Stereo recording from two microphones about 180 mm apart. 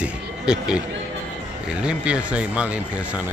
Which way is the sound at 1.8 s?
5° right (ahead or behind).